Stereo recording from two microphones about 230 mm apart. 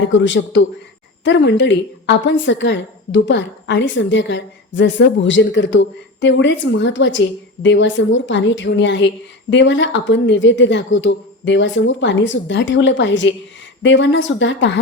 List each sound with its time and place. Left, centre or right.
0.1 s a woman's voice: left